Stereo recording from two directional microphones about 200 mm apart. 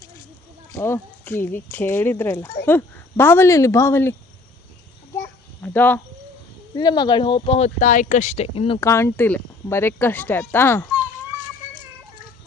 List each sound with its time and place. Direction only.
0.7 s speech: 15° left (ahead or behind)
5.1 s a sound: 10° left (ahead or behind)
6.7 s speech: 20° left (ahead or behind)
8.8 s speech: 15° left (ahead or behind)